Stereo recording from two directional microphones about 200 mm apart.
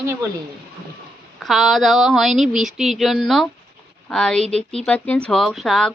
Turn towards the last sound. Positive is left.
turn(degrees=0)  # may be behind; listen again after turning